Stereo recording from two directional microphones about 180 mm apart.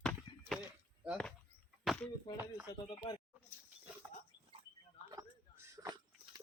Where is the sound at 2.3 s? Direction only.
10° right (ahead or behind).